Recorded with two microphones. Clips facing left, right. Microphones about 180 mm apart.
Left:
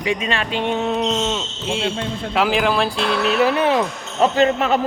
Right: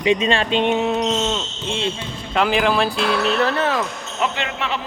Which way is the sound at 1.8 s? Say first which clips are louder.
Left 3 dB; 60° left (ahead or behind).